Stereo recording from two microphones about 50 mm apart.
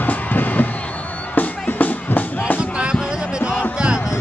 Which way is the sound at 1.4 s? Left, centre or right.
Left.